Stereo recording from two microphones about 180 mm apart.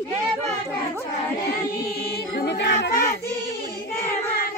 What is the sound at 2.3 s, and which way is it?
Music, 75° left (ahead or behind).